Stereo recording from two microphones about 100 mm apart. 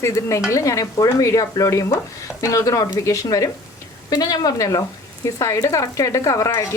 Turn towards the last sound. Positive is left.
turn(degrees=35)  # may be behind; listen again after turning